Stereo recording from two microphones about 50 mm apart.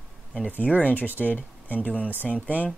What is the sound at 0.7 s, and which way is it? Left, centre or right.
Speech, left.